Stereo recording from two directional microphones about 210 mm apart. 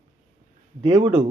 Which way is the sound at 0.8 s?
20° right (ahead or behind).